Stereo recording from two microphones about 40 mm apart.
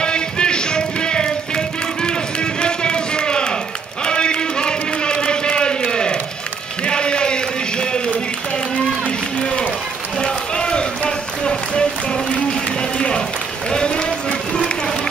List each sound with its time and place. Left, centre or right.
0.0 s music: left
4.0 s a sound: left
9.4 s run: centre